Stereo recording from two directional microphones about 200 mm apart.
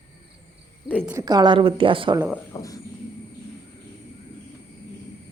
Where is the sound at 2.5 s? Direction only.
15° left (ahead or behind).